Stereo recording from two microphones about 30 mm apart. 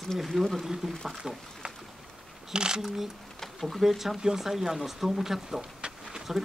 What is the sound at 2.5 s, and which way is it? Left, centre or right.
Speech, right.